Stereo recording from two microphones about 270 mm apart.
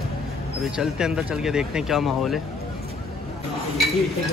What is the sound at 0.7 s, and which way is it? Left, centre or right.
Speech, centre.